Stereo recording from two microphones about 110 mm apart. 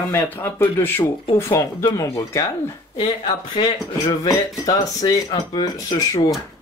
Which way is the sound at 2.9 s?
50° left (ahead or behind).